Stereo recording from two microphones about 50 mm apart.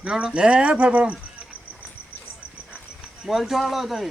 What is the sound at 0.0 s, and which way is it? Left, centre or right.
Speech, centre.